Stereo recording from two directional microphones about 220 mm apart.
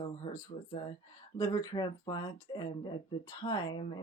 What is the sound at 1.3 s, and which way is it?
Speech, 15° left (ahead or behind).